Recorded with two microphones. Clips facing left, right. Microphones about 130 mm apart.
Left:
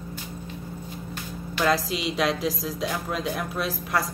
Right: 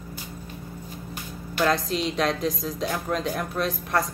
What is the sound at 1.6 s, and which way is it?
Speech, 5° left (ahead or behind).